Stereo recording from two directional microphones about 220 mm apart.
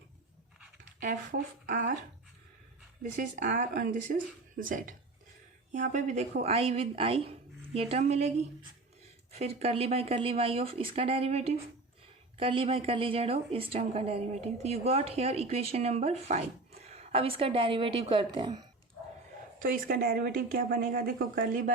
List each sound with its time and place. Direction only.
1.0 s speech: 35° right (ahead or behind)
3.0 s speech: 35° right (ahead or behind)
19.5 s speech: 40° right (ahead or behind)